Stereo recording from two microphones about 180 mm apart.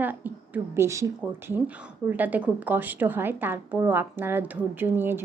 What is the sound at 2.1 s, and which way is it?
A woman's voice, 10° right (ahead or behind).